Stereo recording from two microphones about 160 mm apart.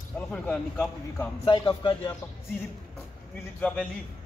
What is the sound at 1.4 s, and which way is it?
Speech, 30° left (ahead or behind).